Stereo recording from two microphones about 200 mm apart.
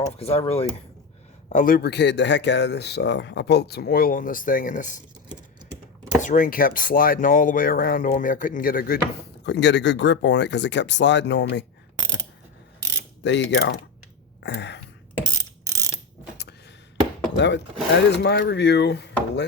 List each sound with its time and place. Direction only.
0.2 s speech: 30° left (ahead or behind)
1.5 s speech: 45° left (ahead or behind)
6.2 s speech: 40° left (ahead or behind)
9.4 s speech: 60° left (ahead or behind)
13.2 s speech: 60° left (ahead or behind)
14.4 s a sound: 60° left (ahead or behind)
15.3 s mechanisms: 15° right (ahead or behind)
17.3 s speech: 60° left (ahead or behind)